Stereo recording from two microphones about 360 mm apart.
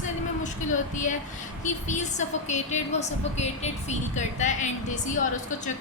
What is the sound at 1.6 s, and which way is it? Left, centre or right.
A woman's voice, centre.